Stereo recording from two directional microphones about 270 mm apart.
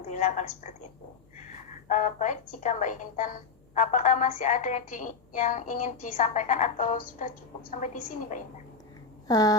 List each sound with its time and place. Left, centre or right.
0.0 s a woman's voice: left
9.2 s speech: centre